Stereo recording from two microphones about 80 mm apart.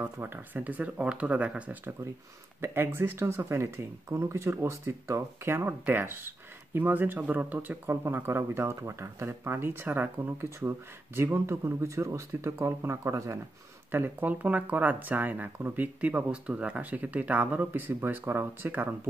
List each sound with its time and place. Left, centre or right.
0.0 s speech: right
2.6 s speech: right
13.9 s speech: right